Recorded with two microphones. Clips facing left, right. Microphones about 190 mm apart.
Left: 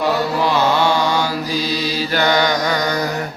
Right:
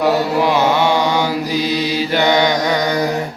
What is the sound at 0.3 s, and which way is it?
Mantra, 15° right (ahead or behind).